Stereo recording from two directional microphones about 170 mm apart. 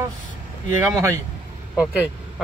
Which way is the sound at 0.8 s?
15° right (ahead or behind).